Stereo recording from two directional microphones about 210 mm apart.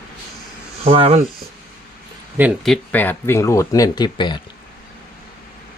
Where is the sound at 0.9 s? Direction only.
25° right (ahead or behind).